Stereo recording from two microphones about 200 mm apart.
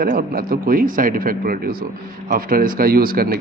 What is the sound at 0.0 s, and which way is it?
Speech, 45° right (ahead or behind).